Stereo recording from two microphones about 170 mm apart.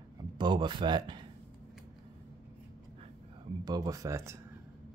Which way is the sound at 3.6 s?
20° right (ahead or behind).